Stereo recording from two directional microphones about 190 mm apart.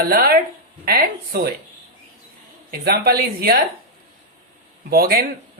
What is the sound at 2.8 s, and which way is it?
Speech, 55° right (ahead or behind).